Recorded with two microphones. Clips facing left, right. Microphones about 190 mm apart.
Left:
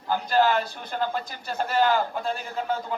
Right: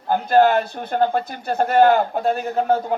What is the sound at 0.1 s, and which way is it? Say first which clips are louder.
Speech: right 7 dB; 55° right (ahead or behind).